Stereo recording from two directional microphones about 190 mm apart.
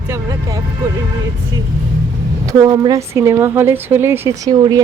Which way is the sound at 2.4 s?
20° right (ahead or behind).